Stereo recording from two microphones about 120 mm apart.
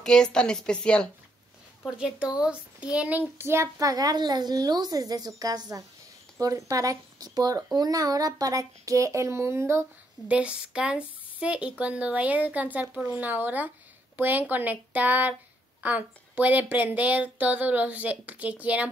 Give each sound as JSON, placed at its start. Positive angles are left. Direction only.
{"t": 0.0, "sound": "a woman's voice", "side_deg": 5}
{"t": 1.9, "sound": "a child's voice", "side_deg": -10}
{"t": 10.2, "sound": "speech", "side_deg": -10}